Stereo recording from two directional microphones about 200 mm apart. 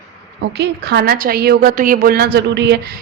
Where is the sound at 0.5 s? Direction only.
60° right (ahead or behind).